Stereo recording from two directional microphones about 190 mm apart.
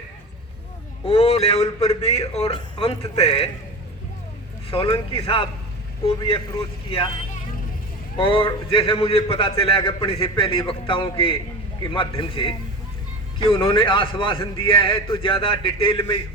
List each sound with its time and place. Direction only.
1.0 s a man's voice: 30° left (ahead or behind)
4.7 s a man's voice: 30° left (ahead or behind)
8.2 s a man's voice: 25° left (ahead or behind)